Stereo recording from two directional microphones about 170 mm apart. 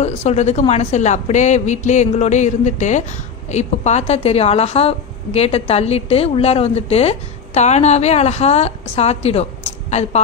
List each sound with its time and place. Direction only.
0.0 s a woman's voice: 40° left (ahead or behind)